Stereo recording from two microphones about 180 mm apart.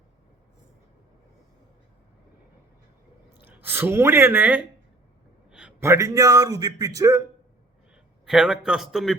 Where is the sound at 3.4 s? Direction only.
10° right (ahead or behind).